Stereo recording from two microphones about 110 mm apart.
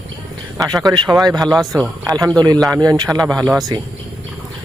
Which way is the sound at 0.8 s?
40° right (ahead or behind).